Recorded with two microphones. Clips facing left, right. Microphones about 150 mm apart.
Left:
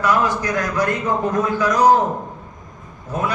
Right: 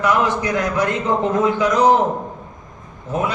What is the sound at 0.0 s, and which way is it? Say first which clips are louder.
Speech: right 1 dB; 20° right (ahead or behind).